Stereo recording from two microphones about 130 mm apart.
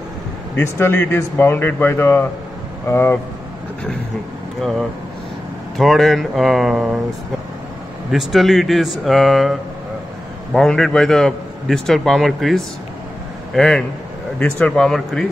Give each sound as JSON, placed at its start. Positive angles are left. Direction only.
{"t": 0.6, "sound": "speech", "side_deg": 15}
{"t": 4.6, "sound": "a man's voice", "side_deg": 0}
{"t": 8.1, "sound": "a man's voice", "side_deg": 0}